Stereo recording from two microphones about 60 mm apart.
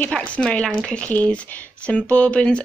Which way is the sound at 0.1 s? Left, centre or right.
Left.